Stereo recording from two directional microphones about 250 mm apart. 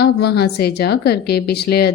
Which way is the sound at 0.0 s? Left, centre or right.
Left.